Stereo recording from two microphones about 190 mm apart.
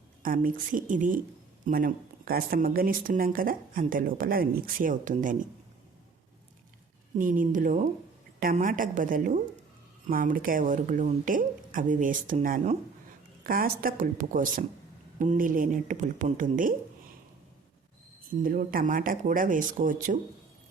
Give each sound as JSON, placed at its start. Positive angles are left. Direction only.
{"t": 0.2, "sound": "a woman's voice", "side_deg": -45}
{"t": 7.2, "sound": "a woman's voice", "side_deg": -45}
{"t": 18.4, "sound": "a woman's voice", "side_deg": -50}